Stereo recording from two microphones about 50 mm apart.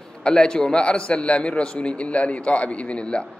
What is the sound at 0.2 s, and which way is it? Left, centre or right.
A man's voice, centre.